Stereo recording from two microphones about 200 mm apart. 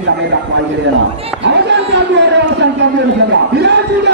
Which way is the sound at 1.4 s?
60° right (ahead or behind).